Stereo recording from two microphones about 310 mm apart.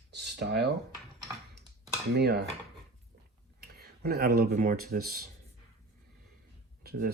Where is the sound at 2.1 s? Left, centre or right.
Right.